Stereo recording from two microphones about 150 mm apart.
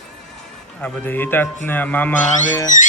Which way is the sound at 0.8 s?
15° left (ahead or behind).